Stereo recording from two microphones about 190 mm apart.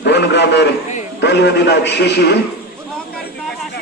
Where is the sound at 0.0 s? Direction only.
65° left (ahead or behind).